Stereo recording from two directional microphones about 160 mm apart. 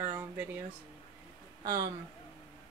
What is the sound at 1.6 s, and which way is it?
Speech, 20° right (ahead or behind).